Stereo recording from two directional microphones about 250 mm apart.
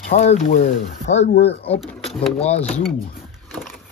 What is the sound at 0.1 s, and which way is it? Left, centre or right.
Speech, left.